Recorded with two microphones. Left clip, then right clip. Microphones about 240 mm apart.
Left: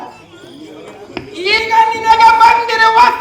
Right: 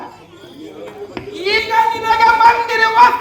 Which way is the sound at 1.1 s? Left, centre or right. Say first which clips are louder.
Left 3 dB; left.